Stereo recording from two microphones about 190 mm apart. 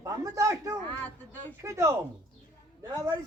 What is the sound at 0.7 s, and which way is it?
Speech, 10° left (ahead or behind).